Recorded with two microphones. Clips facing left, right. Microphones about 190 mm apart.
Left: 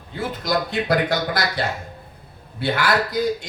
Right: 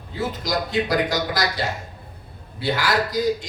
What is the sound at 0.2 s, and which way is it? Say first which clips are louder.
Speech: left 1 dB; 55° left (ahead or behind).